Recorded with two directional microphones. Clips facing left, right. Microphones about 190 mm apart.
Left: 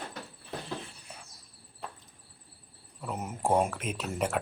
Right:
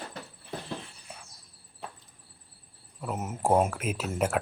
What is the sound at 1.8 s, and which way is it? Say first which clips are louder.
Chop: even; centre (ahead or behind).